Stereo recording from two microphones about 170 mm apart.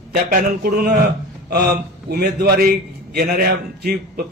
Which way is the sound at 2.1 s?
65° right (ahead or behind).